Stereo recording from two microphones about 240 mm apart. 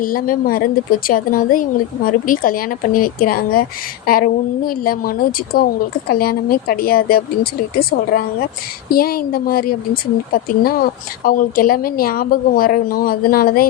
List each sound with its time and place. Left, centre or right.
0.0 s speech: left